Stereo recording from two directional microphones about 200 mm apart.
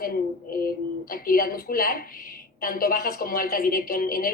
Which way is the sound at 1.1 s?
45° left (ahead or behind).